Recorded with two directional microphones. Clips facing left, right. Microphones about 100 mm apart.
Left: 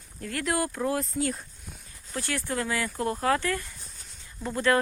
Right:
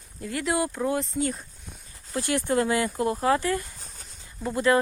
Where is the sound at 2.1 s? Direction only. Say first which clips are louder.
Right 6 dB; 20° right (ahead or behind).